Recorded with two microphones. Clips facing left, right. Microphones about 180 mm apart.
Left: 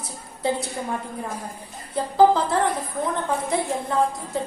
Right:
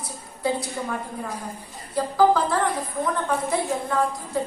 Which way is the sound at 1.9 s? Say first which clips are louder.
Left 2 dB; 25° left (ahead or behind).